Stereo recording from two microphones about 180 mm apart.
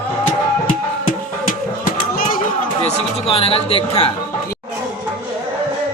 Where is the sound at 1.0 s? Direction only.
50° left (ahead or behind).